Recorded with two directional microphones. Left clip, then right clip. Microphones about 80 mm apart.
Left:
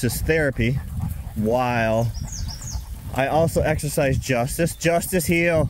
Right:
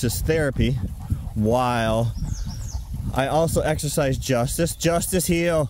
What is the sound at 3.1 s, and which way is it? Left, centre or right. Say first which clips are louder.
Speech: left 1 dB; right.